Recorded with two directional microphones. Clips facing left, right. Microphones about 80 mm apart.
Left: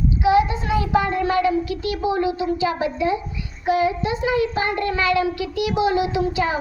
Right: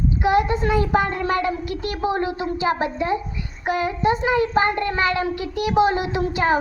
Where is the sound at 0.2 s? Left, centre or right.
Right.